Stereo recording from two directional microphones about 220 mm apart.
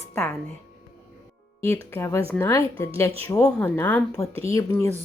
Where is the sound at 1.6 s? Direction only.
10° left (ahead or behind).